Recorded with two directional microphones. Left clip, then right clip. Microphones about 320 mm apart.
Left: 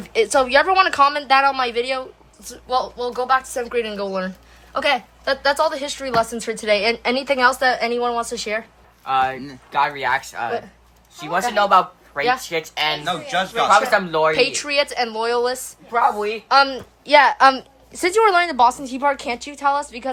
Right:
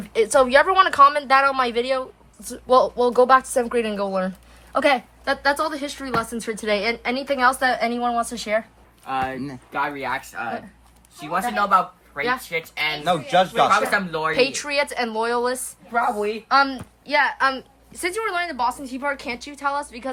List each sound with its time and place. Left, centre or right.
0.1 s speech: centre
9.0 s speech: left
11.3 s speech: centre
13.1 s a man's voice: centre
13.9 s a woman's voice: centre
14.3 s a woman's voice: centre